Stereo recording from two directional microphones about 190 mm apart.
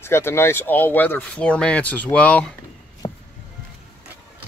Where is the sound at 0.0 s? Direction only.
15° left (ahead or behind).